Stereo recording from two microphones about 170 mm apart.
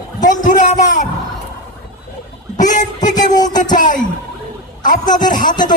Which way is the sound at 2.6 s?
45° left (ahead or behind).